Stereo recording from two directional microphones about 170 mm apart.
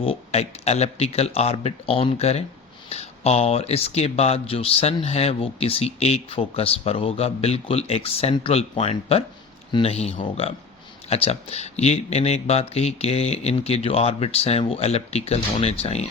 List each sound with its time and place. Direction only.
0.0 s speech: 35° left (ahead or behind)